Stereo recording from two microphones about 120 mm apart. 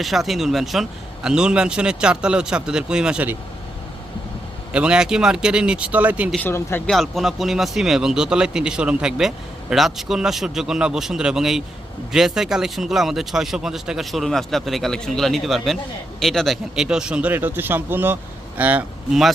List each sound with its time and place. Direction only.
0.0 s a man's voice: centre (ahead or behind)
4.7 s a man's voice: 10° right (ahead or behind)
6.4 s speech: 20° left (ahead or behind)
6.8 s a man's voice: centre (ahead or behind)